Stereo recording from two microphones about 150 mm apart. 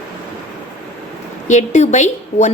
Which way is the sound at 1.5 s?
50° left (ahead or behind).